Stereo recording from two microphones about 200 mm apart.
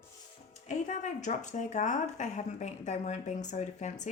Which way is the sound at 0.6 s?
40° left (ahead or behind).